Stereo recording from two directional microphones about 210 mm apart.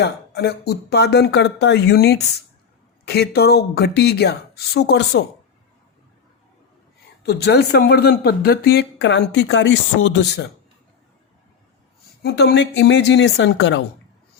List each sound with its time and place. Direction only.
0.0 s speech: 50° left (ahead or behind)
7.2 s speech: 50° left (ahead or behind)
12.2 s speech: 50° left (ahead or behind)